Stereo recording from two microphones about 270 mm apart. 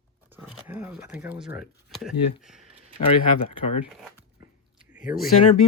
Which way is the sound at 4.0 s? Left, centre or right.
Centre.